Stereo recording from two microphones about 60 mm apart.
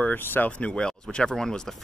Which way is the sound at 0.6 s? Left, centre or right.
Centre.